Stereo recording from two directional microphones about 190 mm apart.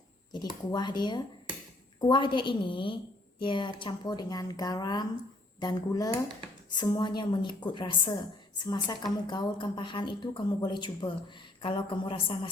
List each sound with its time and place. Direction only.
0.7 s a woman's voice: 20° left (ahead or behind)